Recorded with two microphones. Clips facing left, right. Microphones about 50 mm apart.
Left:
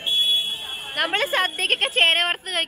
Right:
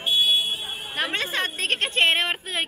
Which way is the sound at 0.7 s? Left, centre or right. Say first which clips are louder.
Left 1 dB; left.